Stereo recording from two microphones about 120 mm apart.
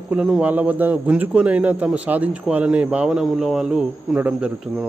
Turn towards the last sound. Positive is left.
turn(degrees=-10)  # may be behind; listen again after turning